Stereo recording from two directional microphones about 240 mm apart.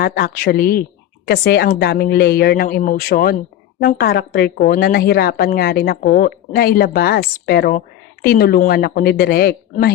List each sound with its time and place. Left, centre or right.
0.0 s a woman's voice: left